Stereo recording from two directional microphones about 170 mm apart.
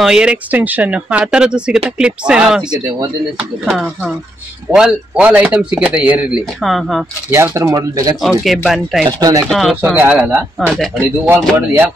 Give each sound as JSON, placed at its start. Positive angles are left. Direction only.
{"t": 0.0, "sound": "speech", "side_deg": -5}
{"t": 7.2, "sound": "speech", "side_deg": -15}
{"t": 8.2, "sound": "speech", "side_deg": 0}
{"t": 9.2, "sound": "speech", "side_deg": -20}
{"t": 9.5, "sound": "speech", "side_deg": 0}